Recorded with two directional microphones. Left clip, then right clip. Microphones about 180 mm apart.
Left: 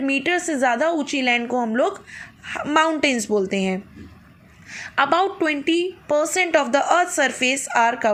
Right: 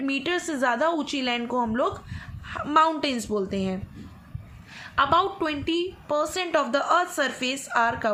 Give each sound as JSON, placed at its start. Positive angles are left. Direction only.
{"t": 0.0, "sound": "a woman's voice", "side_deg": 10}